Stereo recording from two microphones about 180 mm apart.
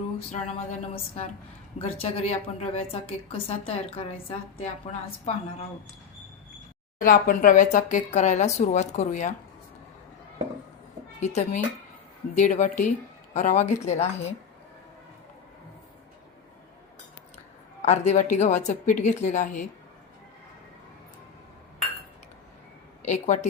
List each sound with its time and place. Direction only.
0.3 s a woman's voice: 40° left (ahead or behind)
7.0 s speech: 50° left (ahead or behind)
11.2 s a woman's voice: 40° left (ahead or behind)
17.8 s a woman's voice: 40° left (ahead or behind)
23.0 s a woman's voice: 40° left (ahead or behind)